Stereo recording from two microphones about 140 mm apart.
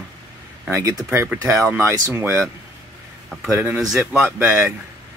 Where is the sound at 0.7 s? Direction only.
20° right (ahead or behind).